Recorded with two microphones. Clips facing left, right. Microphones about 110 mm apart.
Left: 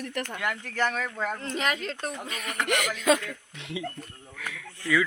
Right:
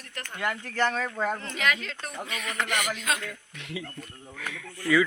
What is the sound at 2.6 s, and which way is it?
Speech, 85° left.